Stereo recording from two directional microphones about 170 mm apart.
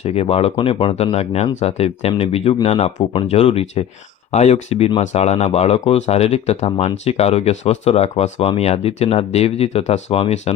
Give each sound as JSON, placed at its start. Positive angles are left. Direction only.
{"t": 0.0, "sound": "speech", "side_deg": 35}